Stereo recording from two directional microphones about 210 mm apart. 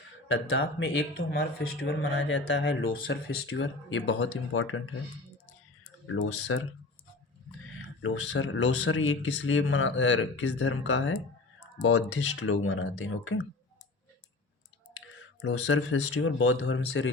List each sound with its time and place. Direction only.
0.3 s speech: 65° left (ahead or behind)
1.3 s speech: 45° left (ahead or behind); by 4.8 s 75° left (ahead or behind)
6.5 s speech: 75° left (ahead or behind)
8.0 s speech: 65° left (ahead or behind)
11.8 s speech: 80° left
15.0 s speech: 65° left (ahead or behind)